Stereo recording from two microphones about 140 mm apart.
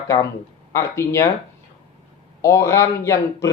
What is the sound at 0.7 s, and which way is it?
Speech, 20° left (ahead or behind).